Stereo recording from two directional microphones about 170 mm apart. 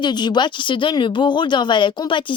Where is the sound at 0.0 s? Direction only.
25° left (ahead or behind).